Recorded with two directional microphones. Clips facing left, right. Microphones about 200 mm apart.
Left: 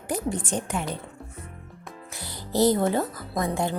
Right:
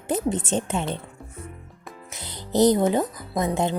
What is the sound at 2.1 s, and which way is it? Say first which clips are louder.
Speech: right 3 dB; 20° right (ahead or behind).